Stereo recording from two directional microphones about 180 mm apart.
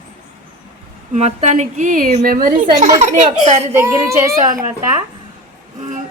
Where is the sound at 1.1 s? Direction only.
40° right (ahead or behind).